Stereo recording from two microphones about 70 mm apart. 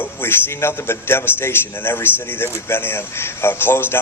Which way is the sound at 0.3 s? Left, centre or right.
Left.